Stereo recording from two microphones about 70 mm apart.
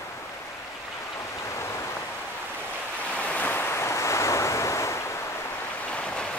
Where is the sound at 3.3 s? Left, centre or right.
Left.